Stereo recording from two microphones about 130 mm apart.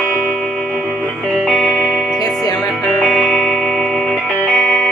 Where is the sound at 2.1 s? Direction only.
30° left (ahead or behind).